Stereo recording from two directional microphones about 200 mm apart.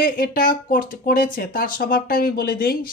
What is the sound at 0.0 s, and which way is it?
Speech, 45° left (ahead or behind).